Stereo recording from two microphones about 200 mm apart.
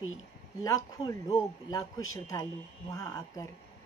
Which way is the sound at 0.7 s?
15° left (ahead or behind).